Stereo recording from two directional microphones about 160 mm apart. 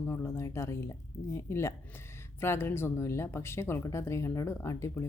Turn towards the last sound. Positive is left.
turn(degrees=20)  # may be behind; listen again after turning